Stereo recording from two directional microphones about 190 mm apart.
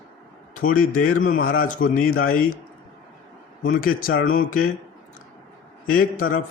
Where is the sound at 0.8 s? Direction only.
45° left (ahead or behind).